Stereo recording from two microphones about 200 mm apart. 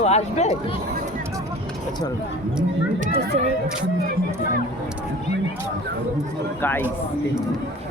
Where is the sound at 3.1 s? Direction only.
30° right (ahead or behind).